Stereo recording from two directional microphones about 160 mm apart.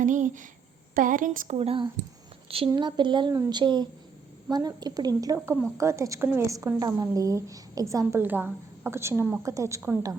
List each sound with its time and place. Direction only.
0.0 s a woman's voice: 55° right (ahead or behind)
1.5 s a woman's voice: 35° right (ahead or behind); by 10.2 s 20° right (ahead or behind)